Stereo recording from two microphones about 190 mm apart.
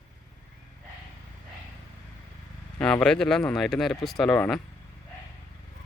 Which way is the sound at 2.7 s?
5° left (ahead or behind).